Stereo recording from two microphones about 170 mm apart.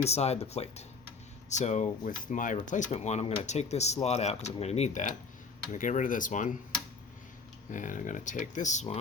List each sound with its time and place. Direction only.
0.0 s speech: 40° left (ahead or behind)
7.7 s speech: 50° left (ahead or behind)